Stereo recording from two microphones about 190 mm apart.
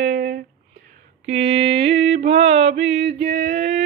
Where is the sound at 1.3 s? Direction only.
30° right (ahead or behind).